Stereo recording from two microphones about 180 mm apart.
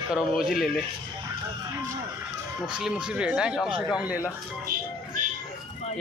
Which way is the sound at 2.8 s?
5° right (ahead or behind).